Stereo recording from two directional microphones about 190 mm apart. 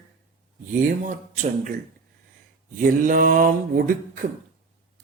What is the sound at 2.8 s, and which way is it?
Mantra, 45° right (ahead or behind).